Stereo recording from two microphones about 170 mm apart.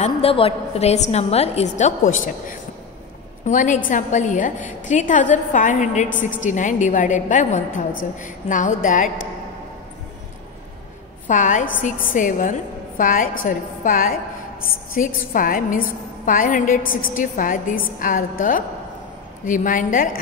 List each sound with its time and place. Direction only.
0.0 s a woman's voice: 35° left (ahead or behind)
11.2 s a woman's voice: 50° left (ahead or behind)